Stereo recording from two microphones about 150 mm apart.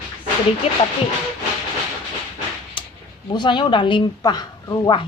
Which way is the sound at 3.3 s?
30° left (ahead or behind).